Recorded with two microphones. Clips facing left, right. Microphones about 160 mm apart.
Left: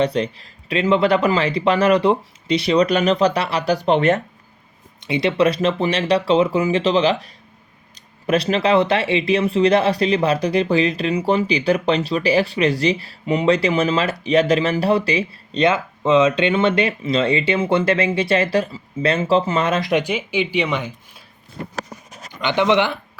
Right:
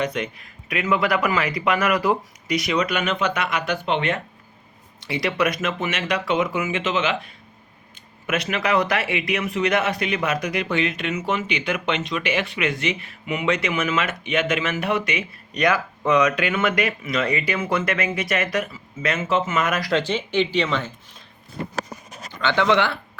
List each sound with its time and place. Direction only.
0.0 s speech: 30° left (ahead or behind)
4.9 s speech: 20° left (ahead or behind)
8.3 s speech: 30° left (ahead or behind); by 21.2 s 15° left (ahead or behind)
22.3 s speech: 15° left (ahead or behind)